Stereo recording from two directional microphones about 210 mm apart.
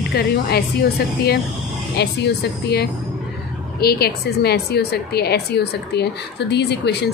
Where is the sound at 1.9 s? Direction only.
50° left (ahead or behind).